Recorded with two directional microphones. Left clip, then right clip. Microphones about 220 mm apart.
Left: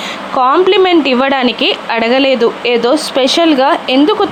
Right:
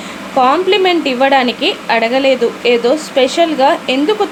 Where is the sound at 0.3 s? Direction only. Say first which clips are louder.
Left 2 dB; 20° left (ahead or behind).